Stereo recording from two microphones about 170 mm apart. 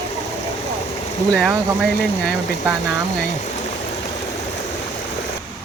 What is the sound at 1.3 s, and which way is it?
Speech, centre (ahead or behind).